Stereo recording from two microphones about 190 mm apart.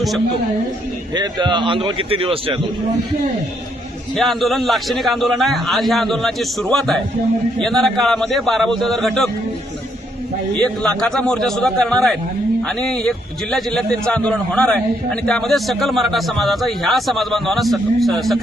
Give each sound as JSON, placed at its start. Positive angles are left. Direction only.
{"t": 1.1, "sound": "a man's voice", "side_deg": -25}
{"t": 4.1, "sound": "a man's voice", "side_deg": 0}
{"t": 10.6, "sound": "a man's voice", "side_deg": 5}